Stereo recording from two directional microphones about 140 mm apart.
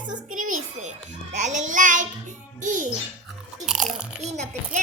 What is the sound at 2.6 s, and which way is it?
Speech, 65° right (ahead or behind).